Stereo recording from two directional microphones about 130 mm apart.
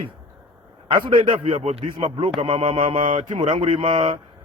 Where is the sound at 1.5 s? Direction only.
70° right (ahead or behind).